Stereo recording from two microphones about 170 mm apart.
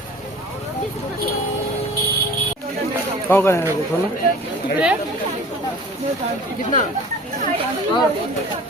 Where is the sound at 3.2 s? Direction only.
15° left (ahead or behind).